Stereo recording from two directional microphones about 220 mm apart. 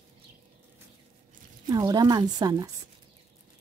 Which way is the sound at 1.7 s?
20° right (ahead or behind).